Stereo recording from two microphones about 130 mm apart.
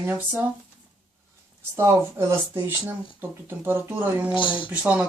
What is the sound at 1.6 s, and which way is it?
Speech, 20° right (ahead or behind).